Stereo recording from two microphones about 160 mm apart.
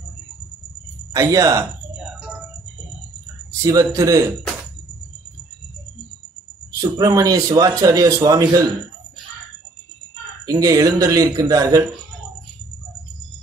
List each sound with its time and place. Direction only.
1.1 s a man's voice: 20° right (ahead or behind)
3.6 s a man's voice: 20° right (ahead or behind)
7.0 s a man's voice: 25° right (ahead or behind)
10.4 s a man's voice: 20° right (ahead or behind)